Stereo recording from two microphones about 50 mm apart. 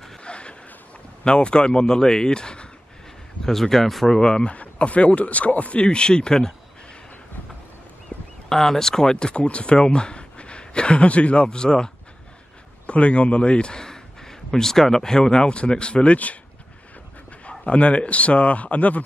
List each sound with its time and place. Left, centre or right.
0.2 s a sound: left
1.2 s speech: centre
4.2 s speech: centre
8.5 s speech: centre
12.8 s speech: left
17.5 s speech: left